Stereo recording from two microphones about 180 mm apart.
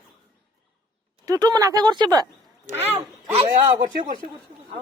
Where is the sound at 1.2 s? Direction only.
20° right (ahead or behind).